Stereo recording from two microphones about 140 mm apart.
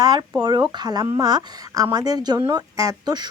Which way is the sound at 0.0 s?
30° right (ahead or behind).